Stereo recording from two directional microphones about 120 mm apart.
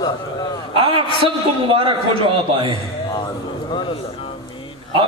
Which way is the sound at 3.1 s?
40° left (ahead or behind).